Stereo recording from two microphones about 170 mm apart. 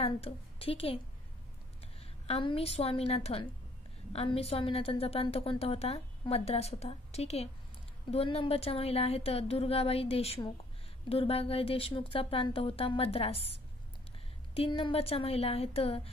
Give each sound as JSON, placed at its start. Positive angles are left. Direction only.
{"t": 0.0, "sound": "a woman's voice", "side_deg": 35}
{"t": 2.0, "sound": "a woman's voice", "side_deg": 35}
{"t": 14.5, "sound": "a woman's voice", "side_deg": 35}